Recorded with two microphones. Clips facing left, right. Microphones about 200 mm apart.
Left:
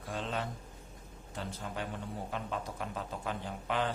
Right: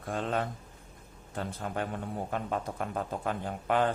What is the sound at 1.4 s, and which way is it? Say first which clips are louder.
Speech: right 5 dB; 55° right (ahead or behind).